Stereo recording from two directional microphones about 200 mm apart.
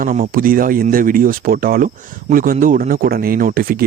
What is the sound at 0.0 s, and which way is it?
Speech, 40° right (ahead or behind).